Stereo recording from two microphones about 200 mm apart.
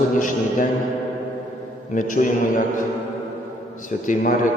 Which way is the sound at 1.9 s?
40° left (ahead or behind).